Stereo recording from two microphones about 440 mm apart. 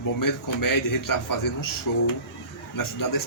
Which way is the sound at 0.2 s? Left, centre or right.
Left.